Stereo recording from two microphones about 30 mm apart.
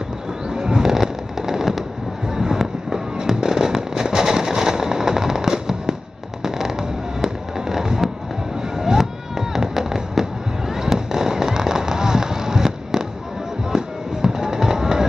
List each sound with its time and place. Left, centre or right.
0.5 s fireworks: right